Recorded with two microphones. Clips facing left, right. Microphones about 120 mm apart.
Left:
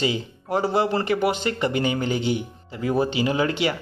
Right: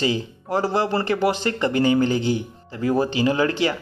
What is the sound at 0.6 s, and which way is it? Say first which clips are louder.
Speech: even; 15° left (ahead or behind).